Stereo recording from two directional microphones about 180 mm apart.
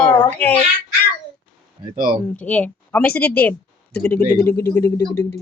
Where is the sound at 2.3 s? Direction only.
10° left (ahead or behind).